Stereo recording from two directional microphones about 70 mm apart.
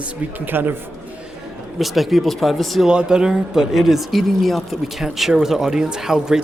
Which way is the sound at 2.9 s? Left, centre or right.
Centre.